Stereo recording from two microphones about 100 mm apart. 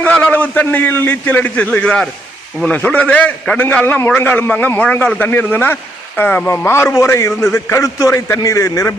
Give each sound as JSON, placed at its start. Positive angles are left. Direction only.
{"t": 0.0, "sound": "a man's voice", "side_deg": 15}